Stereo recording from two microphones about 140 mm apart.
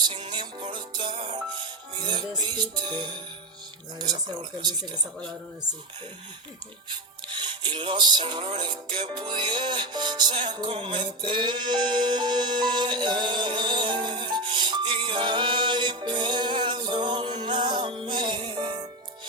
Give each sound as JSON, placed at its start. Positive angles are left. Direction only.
{"t": 0.1, "sound": "music", "side_deg": -35}
{"t": 3.9, "sound": "speech", "side_deg": -30}
{"t": 7.3, "sound": "music", "side_deg": -35}